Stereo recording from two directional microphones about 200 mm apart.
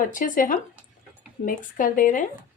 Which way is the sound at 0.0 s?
45° left (ahead or behind).